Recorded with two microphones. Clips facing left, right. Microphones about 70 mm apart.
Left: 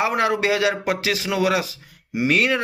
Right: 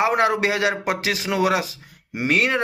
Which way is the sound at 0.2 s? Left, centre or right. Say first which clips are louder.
Even; right.